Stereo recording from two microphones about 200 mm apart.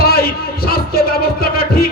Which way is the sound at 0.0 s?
50° left (ahead or behind).